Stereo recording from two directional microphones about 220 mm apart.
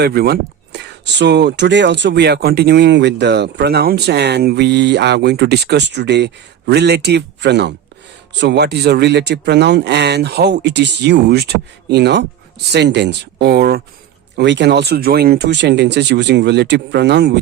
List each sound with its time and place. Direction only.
0.0 s speech: 45° right (ahead or behind)